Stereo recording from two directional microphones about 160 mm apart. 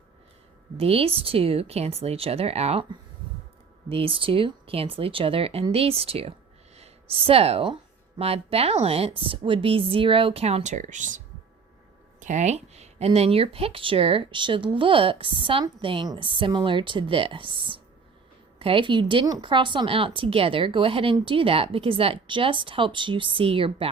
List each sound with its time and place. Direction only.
0.8 s a woman's voice: 40° right (ahead or behind)
12.2 s speech: 50° right (ahead or behind)